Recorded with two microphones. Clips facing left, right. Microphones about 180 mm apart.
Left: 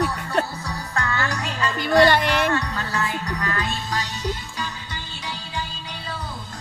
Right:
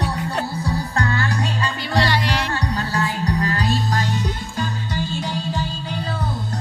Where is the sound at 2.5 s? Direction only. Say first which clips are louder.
Right 1 dB; 30° right (ahead or behind).